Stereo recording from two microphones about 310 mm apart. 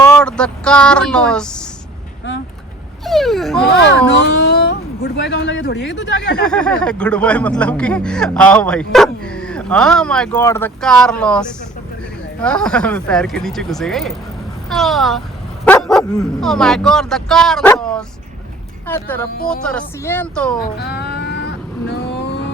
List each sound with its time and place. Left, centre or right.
0.0 s speech: centre
3.0 s speech: centre
3.7 s speech: left
6.4 s speech: centre
20.6 s vehicle: left